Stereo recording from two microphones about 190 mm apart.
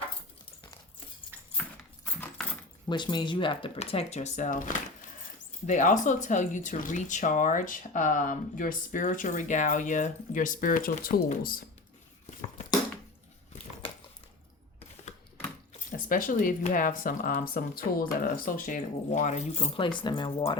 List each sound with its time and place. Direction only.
2.0 s keys jangling: 5° left (ahead or behind)
2.9 s speech: 25° left (ahead or behind); by 11.6 s 50° left (ahead or behind)
16.0 s speech: 45° left (ahead or behind); by 20.6 s 25° left (ahead or behind)